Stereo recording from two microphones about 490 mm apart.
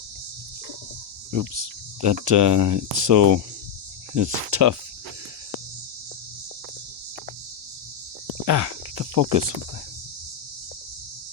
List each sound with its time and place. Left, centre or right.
1.3 s speech: right
8.4 s cricket: right